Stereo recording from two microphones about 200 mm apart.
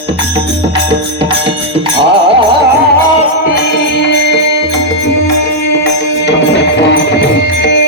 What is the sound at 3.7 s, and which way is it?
Music, 60° left (ahead or behind).